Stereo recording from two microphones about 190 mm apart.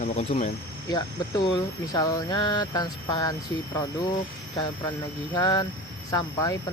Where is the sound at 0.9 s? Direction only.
20° left (ahead or behind).